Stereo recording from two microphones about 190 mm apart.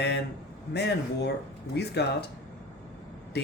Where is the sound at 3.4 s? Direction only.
60° left (ahead or behind).